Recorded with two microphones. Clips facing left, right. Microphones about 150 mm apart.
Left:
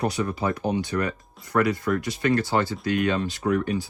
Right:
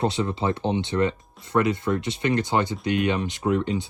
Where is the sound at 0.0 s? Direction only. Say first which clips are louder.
Right 1 dB; 25° right (ahead or behind).